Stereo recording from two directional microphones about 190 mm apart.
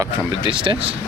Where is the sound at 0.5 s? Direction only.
25° right (ahead or behind).